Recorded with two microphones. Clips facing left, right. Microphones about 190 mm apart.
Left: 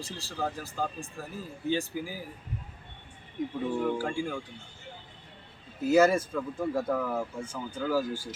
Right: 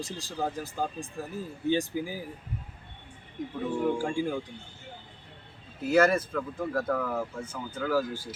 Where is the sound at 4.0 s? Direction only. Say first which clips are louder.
Right 2 dB; 15° right (ahead or behind).